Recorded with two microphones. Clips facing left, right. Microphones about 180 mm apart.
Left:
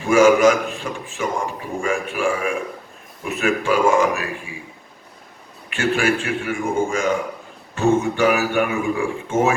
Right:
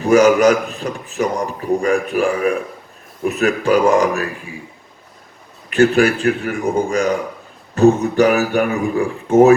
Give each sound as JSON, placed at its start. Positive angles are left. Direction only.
{"t": 0.0, "sound": "a man's voice", "side_deg": -40}
{"t": 5.7, "sound": "a man's voice", "side_deg": -40}